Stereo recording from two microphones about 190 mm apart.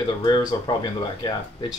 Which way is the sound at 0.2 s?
25° left (ahead or behind).